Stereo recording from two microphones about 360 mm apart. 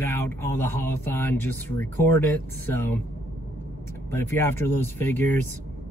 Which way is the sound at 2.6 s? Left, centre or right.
Centre.